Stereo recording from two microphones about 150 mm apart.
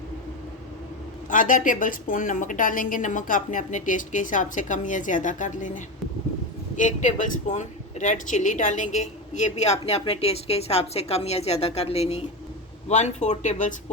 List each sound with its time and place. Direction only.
1.3 s a woman's voice: 60° left (ahead or behind)